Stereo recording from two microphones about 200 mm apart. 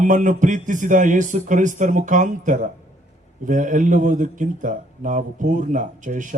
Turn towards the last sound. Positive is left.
turn(degrees=-40)  # may be behind; listen again after turning